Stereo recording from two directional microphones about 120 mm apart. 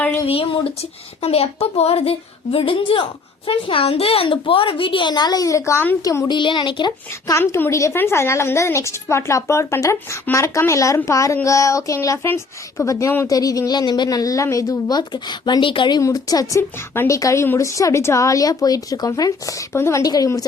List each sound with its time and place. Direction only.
0.3 s speech: 50° left (ahead or behind); by 6.0 s 20° left (ahead or behind)
6.0 s speech: 30° left (ahead or behind)
7.3 s speech: 20° left (ahead or behind); by 16.0 s 45° left (ahead or behind)
16.0 s speech: 30° left (ahead or behind)